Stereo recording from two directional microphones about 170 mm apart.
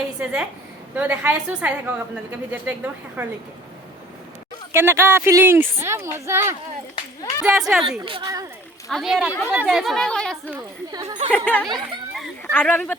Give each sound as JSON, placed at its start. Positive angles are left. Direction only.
{"t": 0.2, "sound": "a woman's voice", "side_deg": -5}
{"t": 4.7, "sound": "a woman's voice", "side_deg": -15}
{"t": 7.4, "sound": "speech", "side_deg": -5}
{"t": 8.2, "sound": "speech", "side_deg": -20}
{"t": 8.9, "sound": "speech", "side_deg": 0}
{"t": 10.9, "sound": "speech", "side_deg": -20}
{"t": 11.3, "sound": "speech", "side_deg": 5}